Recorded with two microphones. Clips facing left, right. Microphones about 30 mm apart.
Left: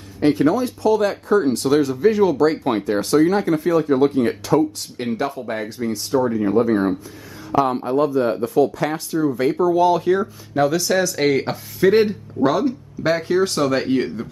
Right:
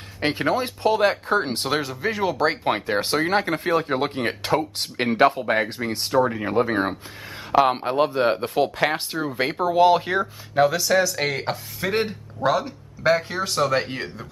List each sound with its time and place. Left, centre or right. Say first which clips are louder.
0.2 s speech: left 6 dB; right
1.8 s speech: left 9 dB; centre
2.3 s speech: left 4 dB; right
6.2 s speech: left 5 dB; right
6.5 s speech: left 4 dB; right
10.6 s speech: left 1 dB; centre